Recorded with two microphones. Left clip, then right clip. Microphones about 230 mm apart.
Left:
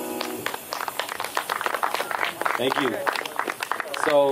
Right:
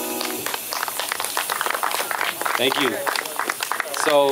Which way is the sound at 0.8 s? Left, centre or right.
Centre.